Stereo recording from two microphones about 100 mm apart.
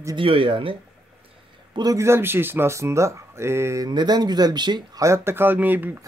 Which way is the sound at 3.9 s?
45° right (ahead or behind).